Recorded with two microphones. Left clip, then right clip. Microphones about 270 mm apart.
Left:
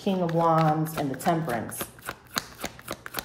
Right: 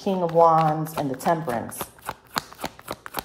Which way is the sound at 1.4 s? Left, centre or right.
Centre.